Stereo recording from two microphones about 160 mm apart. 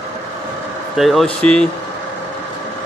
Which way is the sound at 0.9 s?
Centre (ahead or behind).